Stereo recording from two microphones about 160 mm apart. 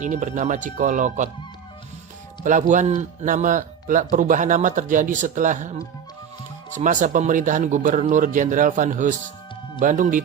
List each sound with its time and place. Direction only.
0.0 s a man's voice: 50° right (ahead or behind)
2.4 s a man's voice: 50° right (ahead or behind)
6.7 s a man's voice: 50° right (ahead or behind)